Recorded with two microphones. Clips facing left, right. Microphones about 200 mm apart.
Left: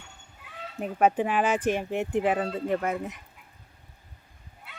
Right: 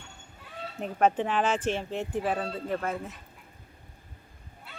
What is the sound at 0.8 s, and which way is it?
Speech, 5° left (ahead or behind).